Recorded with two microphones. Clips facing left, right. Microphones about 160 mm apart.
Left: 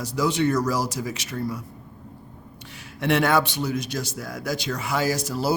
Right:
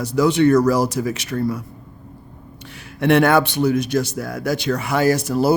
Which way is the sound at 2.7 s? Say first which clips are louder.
Right 7 dB; 60° right (ahead or behind).